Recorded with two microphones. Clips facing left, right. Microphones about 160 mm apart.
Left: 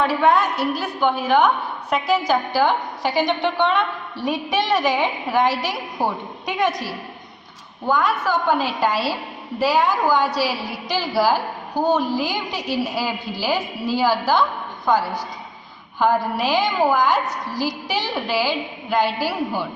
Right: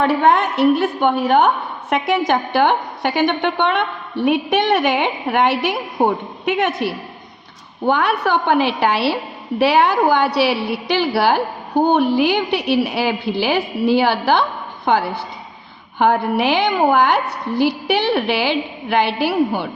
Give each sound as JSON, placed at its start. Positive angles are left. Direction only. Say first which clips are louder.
{"t": 0.3, "sound": "a woman's voice", "louder": "right 5 dB", "side_deg": -65}
{"t": 16.0, "sound": "a woman's voice", "louder": "right 3 dB", "side_deg": -65}